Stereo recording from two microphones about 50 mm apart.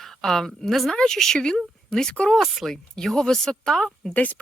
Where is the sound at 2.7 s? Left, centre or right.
Centre.